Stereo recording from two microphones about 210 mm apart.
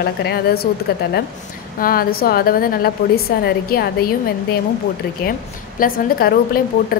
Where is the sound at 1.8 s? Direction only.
45° left (ahead or behind).